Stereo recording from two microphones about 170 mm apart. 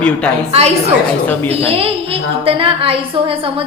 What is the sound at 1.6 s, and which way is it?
A woman's voice, 35° right (ahead or behind).